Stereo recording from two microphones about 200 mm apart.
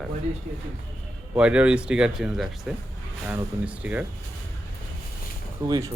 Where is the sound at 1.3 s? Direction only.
5° right (ahead or behind).